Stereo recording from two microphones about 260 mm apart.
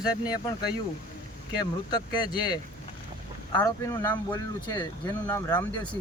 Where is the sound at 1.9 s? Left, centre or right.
Centre.